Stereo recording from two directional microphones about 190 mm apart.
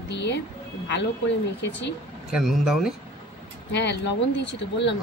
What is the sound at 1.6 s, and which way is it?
Speech, 70° left (ahead or behind).